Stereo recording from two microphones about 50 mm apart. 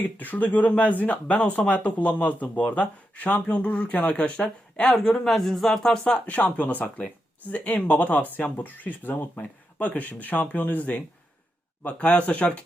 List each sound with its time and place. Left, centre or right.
0.0 s speech: left
4.9 s speech: centre
6.2 s speech: left